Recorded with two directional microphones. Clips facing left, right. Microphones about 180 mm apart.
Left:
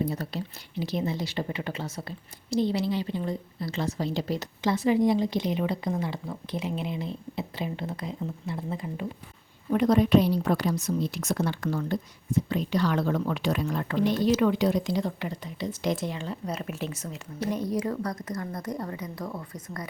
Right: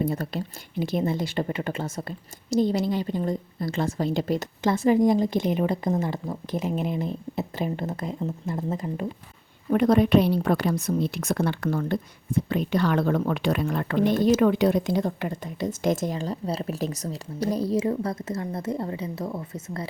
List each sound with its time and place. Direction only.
0.0 s a woman's voice: 50° right (ahead or behind)
9.6 s a woman's voice: 55° right (ahead or behind); by 19.9 s 25° right (ahead or behind)